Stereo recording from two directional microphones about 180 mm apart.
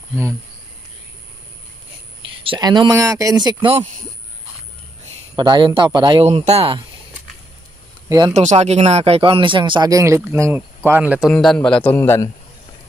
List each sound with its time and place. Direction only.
2.4 s speech: 25° right (ahead or behind)
5.3 s speech: 25° right (ahead or behind)
8.4 s speech: 40° right (ahead or behind); by 11.3 s 5° right (ahead or behind)
11.3 s a man's voice: 5° left (ahead or behind)